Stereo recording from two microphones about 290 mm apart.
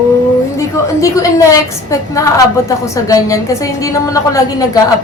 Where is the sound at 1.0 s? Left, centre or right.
Centre.